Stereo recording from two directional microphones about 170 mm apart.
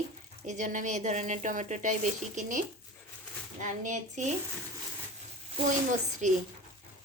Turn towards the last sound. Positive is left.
turn(degrees=-45)  # may be behind; listen again after turning